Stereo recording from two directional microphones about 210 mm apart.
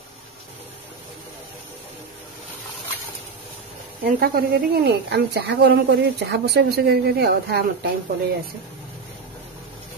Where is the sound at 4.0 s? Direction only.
45° right (ahead or behind).